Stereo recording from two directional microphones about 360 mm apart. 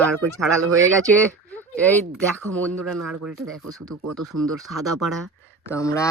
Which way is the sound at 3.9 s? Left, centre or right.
Right.